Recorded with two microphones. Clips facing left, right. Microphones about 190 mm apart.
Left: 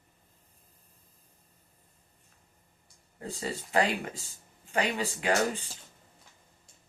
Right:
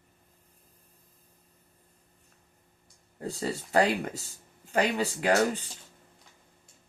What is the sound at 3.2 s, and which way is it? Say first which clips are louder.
Speech: right 3 dB; 40° right (ahead or behind).